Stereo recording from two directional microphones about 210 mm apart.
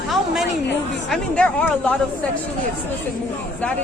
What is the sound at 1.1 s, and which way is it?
Speech, 5° left (ahead or behind).